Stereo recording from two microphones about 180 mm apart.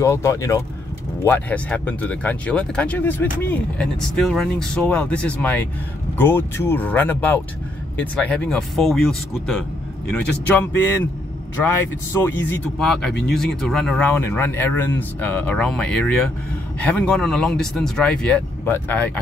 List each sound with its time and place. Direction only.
0.0 s speech: 15° left (ahead or behind)
10.5 s speech: 15° left (ahead or behind)
12.1 s speech: 10° left (ahead or behind)